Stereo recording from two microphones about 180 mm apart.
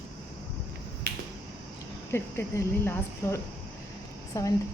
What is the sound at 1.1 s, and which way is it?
Finger snapping, 55° right (ahead or behind).